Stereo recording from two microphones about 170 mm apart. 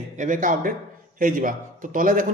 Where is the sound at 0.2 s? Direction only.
50° right (ahead or behind).